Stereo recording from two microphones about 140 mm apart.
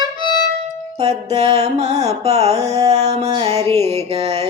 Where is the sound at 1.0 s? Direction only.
50° right (ahead or behind).